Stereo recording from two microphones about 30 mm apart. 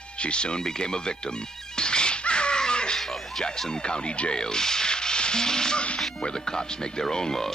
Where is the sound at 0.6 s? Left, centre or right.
Left.